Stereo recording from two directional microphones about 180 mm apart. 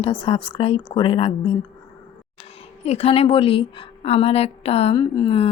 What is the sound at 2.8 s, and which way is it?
A woman's voice, 35° left (ahead or behind).